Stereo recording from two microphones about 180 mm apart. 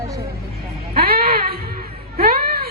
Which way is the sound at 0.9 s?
60° right (ahead or behind).